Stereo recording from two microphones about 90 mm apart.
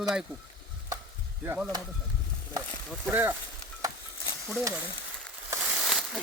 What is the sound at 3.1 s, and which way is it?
Speech, 20° right (ahead or behind).